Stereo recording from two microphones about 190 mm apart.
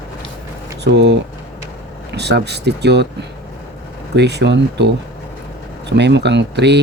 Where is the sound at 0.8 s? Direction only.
65° right (ahead or behind).